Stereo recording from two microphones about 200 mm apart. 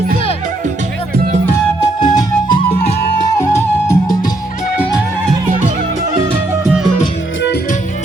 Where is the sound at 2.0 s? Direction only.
20° left (ahead or behind).